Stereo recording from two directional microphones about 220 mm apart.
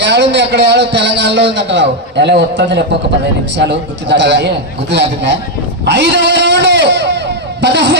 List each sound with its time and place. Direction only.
0.0 s a man's voice: 55° right (ahead or behind)
5.8 s a sound: 50° right (ahead or behind)
7.6 s a man's voice: 50° right (ahead or behind)